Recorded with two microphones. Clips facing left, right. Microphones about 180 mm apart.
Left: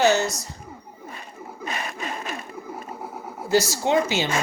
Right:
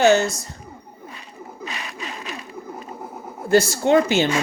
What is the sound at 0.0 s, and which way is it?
Speech, 50° right (ahead or behind).